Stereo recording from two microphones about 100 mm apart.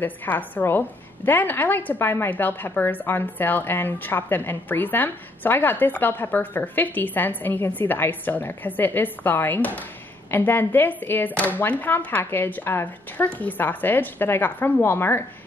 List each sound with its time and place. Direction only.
0.0 s a woman's voice: 20° left (ahead or behind)